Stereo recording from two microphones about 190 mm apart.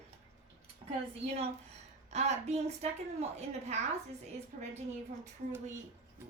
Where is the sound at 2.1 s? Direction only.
35° right (ahead or behind).